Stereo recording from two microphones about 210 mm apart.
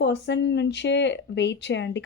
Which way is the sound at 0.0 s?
55° left (ahead or behind).